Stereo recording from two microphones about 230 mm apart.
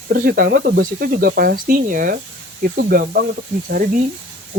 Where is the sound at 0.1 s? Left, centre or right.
Right.